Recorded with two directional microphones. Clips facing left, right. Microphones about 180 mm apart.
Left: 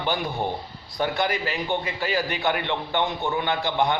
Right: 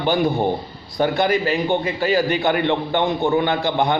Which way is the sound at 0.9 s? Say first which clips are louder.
Right 7 dB; 40° right (ahead or behind).